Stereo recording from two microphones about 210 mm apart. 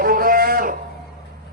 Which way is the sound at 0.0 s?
45° right (ahead or behind).